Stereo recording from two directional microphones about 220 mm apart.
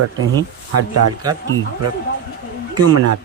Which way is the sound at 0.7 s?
90° right.